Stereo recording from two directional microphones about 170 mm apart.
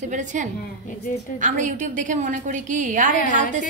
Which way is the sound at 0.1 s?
45° right (ahead or behind).